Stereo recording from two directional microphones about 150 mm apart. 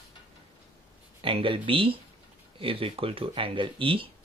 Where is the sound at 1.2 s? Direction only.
35° right (ahead or behind).